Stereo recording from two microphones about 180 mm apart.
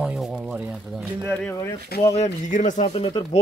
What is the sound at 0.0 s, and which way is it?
Speech, 5° right (ahead or behind).